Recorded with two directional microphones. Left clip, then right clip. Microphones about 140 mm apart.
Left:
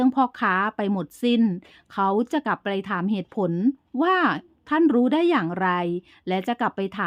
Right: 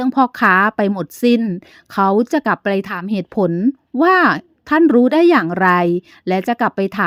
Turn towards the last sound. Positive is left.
turn(degrees=-40)  # may be behind; listen again after turning